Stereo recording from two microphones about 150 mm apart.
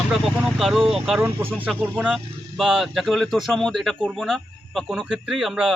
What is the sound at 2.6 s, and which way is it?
Speech, centre (ahead or behind).